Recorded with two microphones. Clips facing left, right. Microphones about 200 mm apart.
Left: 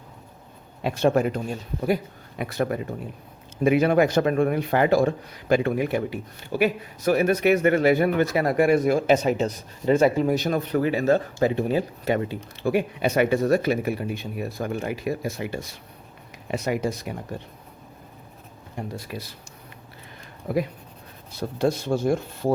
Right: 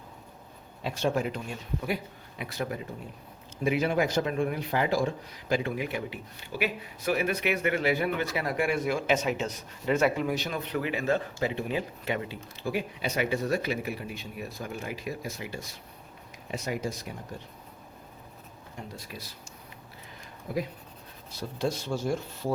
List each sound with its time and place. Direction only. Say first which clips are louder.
0.8 s a man's voice: left 7 dB; 60° left (ahead or behind); by 2.0 s 40° left (ahead or behind)
2.4 s a man's voice: left 8 dB; 55° left (ahead or behind)
12.5 s speech: left 8 dB; 60° left (ahead or behind)
18.8 s speech: left 9 dB; 65° left (ahead or behind)
21.3 s speech: left 7 dB; 55° left (ahead or behind)